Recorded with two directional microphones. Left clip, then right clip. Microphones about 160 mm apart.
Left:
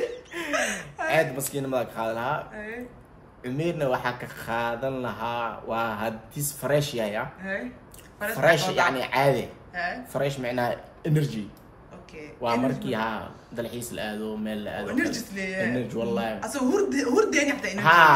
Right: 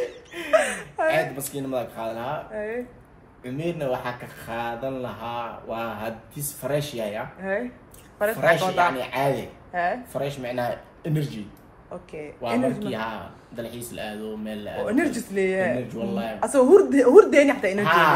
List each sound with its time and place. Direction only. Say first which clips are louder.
0.0 s chuckle: even; centre (ahead or behind)
3.4 s a man's voice: left 1 dB; centre (ahead or behind)
12.6 s a man's voice: right 1 dB; 5° left (ahead or behind)
14.9 s speech: right 4 dB; 20° right (ahead or behind)
15.8 s a man's voice: left 2 dB; centre (ahead or behind)
16.3 s speech: right 14 dB; 20° right (ahead or behind)
17.8 s a man's voice: left 3 dB; 5° left (ahead or behind)